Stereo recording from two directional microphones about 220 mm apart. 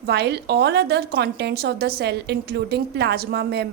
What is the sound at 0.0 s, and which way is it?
A woman's voice, 50° right (ahead or behind).